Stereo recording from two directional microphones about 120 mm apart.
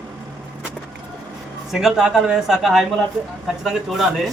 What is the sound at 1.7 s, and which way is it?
Speech, 5° right (ahead or behind).